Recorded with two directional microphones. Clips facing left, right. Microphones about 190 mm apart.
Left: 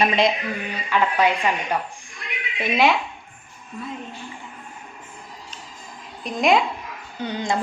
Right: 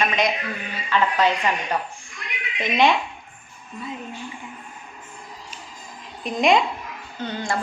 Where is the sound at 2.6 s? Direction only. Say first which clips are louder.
Even; 5° left (ahead or behind).